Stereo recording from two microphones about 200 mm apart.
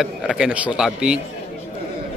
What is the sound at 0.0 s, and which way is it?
A man's voice, centre (ahead or behind).